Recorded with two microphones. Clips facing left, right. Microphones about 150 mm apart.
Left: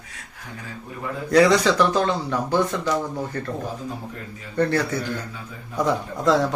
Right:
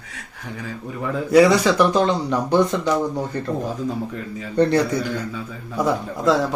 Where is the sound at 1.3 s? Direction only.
10° right (ahead or behind).